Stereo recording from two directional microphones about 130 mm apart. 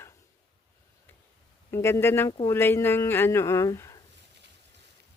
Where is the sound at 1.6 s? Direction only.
20° left (ahead or behind).